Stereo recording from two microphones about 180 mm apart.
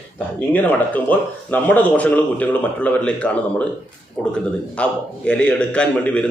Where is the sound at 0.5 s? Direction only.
10° left (ahead or behind).